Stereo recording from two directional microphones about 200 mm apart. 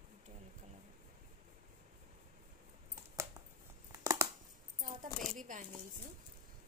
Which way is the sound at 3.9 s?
15° right (ahead or behind).